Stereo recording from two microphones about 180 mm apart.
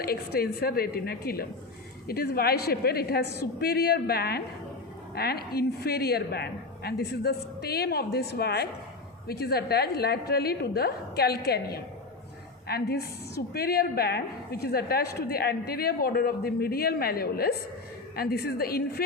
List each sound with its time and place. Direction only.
0.0 s a woman's voice: 55° left (ahead or behind)